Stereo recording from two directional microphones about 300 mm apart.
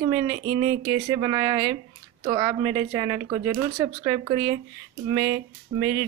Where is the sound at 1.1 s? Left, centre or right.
Centre.